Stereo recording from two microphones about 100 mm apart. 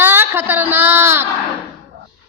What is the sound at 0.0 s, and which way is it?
A woman's voice, 20° right (ahead or behind).